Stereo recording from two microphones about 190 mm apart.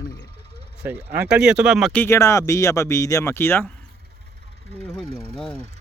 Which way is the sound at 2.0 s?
15° left (ahead or behind).